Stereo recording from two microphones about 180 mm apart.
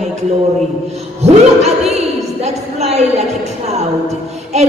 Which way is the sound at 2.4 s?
35° right (ahead or behind).